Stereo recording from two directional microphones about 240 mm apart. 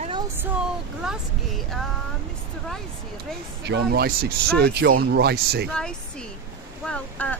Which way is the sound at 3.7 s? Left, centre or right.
Right.